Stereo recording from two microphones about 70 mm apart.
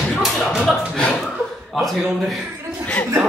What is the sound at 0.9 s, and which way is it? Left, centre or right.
Speech, centre.